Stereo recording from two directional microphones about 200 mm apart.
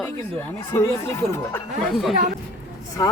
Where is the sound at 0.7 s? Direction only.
10° left (ahead or behind).